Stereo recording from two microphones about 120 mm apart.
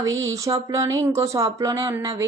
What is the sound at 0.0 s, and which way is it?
A woman's voice, 25° right (ahead or behind).